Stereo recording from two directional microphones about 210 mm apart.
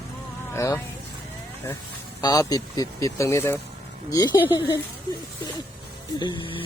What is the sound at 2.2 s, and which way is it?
Speech, 15° left (ahead or behind).